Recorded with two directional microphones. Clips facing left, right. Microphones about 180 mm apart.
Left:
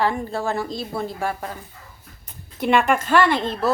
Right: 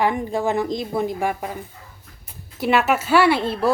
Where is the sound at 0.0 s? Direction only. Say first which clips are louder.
Right 2 dB; 15° right (ahead or behind).